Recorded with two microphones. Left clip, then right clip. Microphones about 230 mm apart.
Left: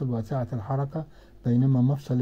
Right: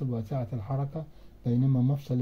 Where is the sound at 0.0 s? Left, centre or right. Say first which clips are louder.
Left 4 dB; left.